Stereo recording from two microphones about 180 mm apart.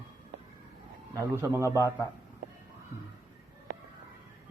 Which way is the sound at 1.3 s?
15° right (ahead or behind).